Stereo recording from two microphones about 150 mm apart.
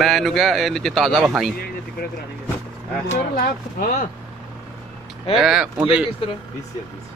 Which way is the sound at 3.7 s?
60° left (ahead or behind).